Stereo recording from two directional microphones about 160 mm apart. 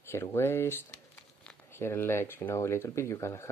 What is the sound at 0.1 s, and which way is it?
Speech, 15° left (ahead or behind).